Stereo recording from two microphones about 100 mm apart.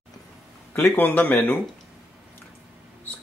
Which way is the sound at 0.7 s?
20° left (ahead or behind).